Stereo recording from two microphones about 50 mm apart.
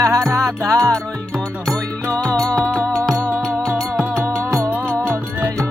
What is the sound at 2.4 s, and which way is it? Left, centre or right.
Music, centre.